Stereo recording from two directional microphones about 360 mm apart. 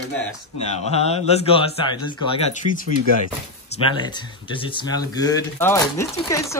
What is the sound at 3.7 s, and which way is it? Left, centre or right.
Speech, centre.